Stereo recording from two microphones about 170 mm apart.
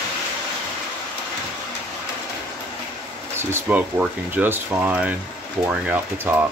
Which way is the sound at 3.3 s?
10° right (ahead or behind).